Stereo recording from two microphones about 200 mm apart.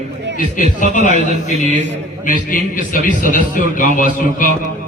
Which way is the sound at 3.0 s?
40° left (ahead or behind).